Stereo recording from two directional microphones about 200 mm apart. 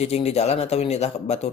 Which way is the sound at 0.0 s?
30° left (ahead or behind).